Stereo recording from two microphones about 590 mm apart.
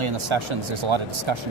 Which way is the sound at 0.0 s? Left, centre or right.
Right.